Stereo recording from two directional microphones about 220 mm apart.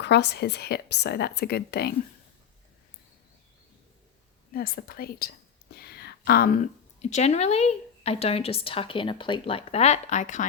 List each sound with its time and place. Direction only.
0.0 s a woman's voice: 50° left (ahead or behind)
4.5 s a woman's voice: 45° left (ahead or behind)
5.9 s a sound: 45° left (ahead or behind)
7.0 s a woman's voice: 30° left (ahead or behind)